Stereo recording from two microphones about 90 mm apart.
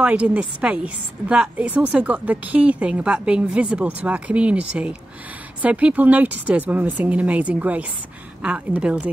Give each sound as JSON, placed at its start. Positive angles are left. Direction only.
{"t": 0.0, "sound": "a woman's voice", "side_deg": -15}